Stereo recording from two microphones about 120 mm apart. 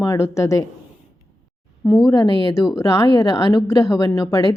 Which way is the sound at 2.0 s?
30° left (ahead or behind).